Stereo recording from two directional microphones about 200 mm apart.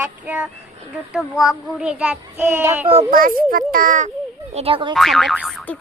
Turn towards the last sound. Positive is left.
turn(degrees=5)  # may be behind; listen again after turning